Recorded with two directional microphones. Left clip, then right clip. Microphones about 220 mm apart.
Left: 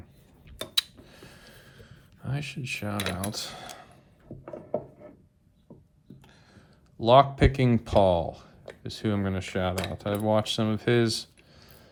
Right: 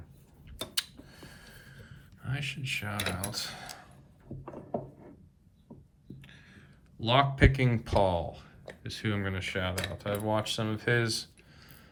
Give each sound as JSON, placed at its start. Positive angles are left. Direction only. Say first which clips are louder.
{"t": 0.7, "sound": "a sound", "louder": "left 8 dB", "side_deg": 30}
{"t": 1.5, "sound": "mechanisms", "louder": "left 1 dB", "side_deg": 30}
{"t": 6.2, "sound": "speech", "louder": "right 2 dB", "side_deg": 15}